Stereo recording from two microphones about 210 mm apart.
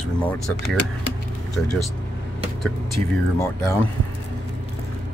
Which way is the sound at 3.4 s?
15° left (ahead or behind).